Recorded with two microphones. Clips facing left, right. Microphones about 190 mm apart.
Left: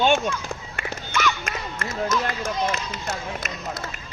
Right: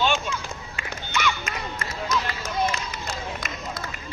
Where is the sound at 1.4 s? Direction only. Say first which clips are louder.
Left 1 dB; 50° left (ahead or behind).